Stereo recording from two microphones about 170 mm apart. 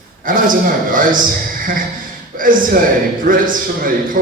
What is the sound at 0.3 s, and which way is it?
Speech, 55° right (ahead or behind).